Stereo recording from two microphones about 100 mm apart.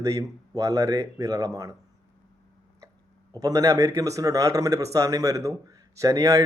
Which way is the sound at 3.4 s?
35° right (ahead or behind).